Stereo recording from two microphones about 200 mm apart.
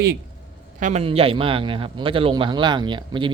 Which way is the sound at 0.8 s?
35° right (ahead or behind).